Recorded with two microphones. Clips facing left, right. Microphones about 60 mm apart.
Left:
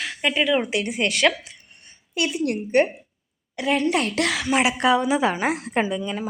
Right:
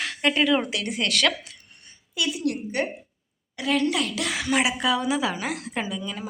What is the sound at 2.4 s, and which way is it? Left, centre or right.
Speech, left.